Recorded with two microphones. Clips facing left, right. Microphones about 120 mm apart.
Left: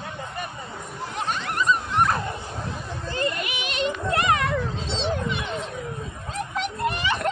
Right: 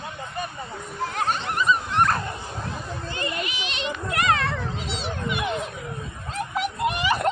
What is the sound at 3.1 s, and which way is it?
Children playing, 45° left (ahead or behind).